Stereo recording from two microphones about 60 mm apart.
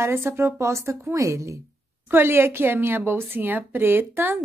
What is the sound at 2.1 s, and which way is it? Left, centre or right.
A woman's voice, right.